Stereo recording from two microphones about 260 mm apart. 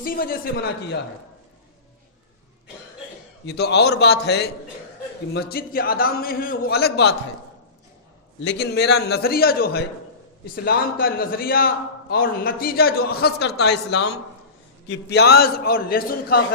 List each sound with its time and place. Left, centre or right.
0.0 s a man's voice: left
3.4 s a man's voice: left
8.4 s a man's voice: left